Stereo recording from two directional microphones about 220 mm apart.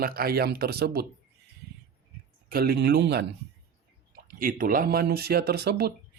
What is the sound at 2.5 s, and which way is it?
Speech, 45° right (ahead or behind).